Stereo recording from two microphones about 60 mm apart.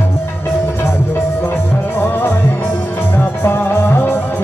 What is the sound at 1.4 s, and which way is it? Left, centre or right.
Music, left.